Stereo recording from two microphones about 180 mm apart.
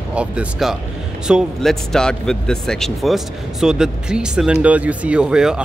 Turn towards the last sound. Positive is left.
turn(degrees=-5)  # may be behind; listen again after turning